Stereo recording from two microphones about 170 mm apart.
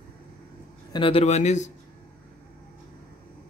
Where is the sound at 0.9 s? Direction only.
30° left (ahead or behind).